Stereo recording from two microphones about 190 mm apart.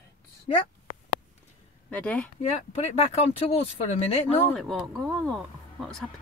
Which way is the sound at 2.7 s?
35° left (ahead or behind).